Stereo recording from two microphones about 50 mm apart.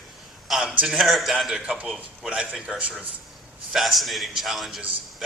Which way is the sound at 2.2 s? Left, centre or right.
Right.